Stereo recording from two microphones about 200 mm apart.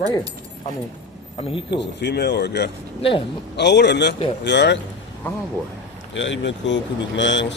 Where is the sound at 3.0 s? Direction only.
25° left (ahead or behind).